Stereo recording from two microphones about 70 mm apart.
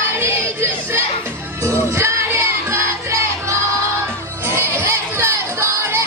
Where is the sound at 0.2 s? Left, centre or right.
Right.